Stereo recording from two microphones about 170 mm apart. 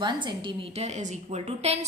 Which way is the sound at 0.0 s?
25° right (ahead or behind).